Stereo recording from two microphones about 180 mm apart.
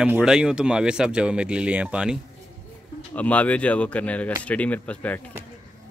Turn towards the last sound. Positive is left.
turn(degrees=10)  # may be behind; listen again after turning